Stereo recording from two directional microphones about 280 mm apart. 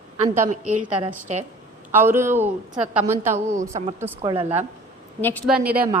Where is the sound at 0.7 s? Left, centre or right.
Right.